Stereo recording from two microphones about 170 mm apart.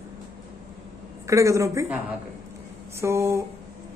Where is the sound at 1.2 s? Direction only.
20° right (ahead or behind).